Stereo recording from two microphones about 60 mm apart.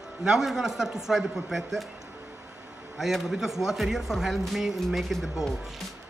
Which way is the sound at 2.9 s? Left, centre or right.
Centre.